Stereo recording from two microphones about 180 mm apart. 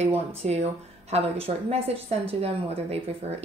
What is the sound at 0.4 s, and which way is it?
A woman's voice, 35° right (ahead or behind).